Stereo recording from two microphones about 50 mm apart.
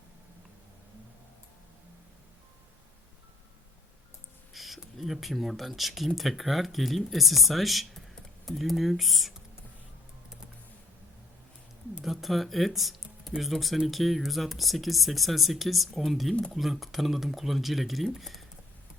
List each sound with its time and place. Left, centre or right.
4.5 s speech: centre
12.0 s speech: centre